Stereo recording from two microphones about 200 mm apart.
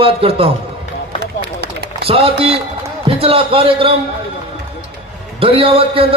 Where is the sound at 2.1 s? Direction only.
30° right (ahead or behind).